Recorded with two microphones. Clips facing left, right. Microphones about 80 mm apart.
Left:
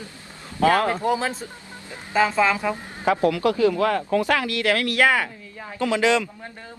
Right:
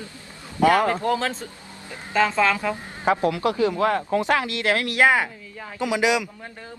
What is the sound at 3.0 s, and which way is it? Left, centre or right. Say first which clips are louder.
Speech: left 1 dB; right.